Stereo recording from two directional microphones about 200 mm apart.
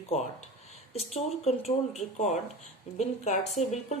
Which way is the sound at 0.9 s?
30° left (ahead or behind).